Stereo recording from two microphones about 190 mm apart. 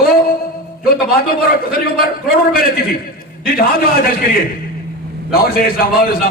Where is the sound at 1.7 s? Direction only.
50° left (ahead or behind).